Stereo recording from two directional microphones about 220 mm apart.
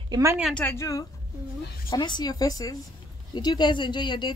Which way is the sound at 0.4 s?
5° left (ahead or behind).